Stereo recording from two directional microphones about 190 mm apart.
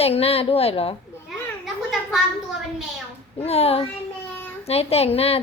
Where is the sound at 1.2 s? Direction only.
Centre (ahead or behind).